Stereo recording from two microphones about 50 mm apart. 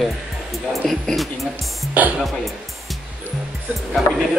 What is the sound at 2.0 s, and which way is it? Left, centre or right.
Speech, right.